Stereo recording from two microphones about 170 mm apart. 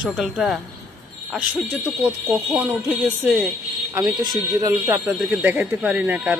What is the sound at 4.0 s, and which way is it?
A man's voice, 20° right (ahead or behind).